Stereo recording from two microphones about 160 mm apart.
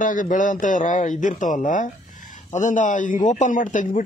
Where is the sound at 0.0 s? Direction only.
55° left (ahead or behind).